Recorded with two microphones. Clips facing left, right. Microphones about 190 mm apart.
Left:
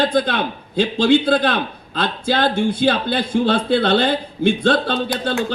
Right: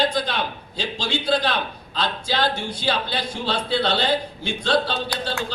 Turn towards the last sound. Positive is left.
turn(degrees=55)  # may be behind; listen again after turning